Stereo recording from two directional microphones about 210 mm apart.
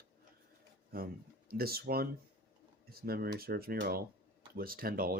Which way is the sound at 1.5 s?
45° right (ahead or behind).